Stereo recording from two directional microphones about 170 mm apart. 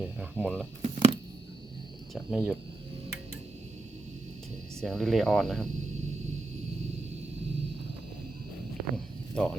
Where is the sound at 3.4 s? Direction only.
40° right (ahead or behind).